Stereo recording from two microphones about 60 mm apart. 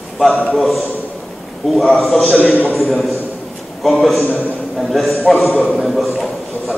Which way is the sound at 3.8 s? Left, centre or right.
Centre.